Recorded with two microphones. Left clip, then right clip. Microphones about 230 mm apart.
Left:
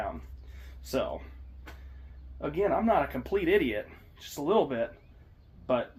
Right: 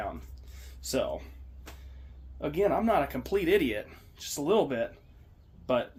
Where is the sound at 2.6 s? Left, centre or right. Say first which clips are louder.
Even; centre.